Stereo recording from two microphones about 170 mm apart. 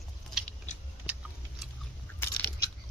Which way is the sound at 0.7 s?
45° left (ahead or behind).